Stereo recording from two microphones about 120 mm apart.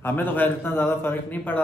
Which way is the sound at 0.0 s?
15° left (ahead or behind).